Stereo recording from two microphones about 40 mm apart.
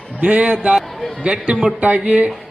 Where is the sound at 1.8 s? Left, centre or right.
Right.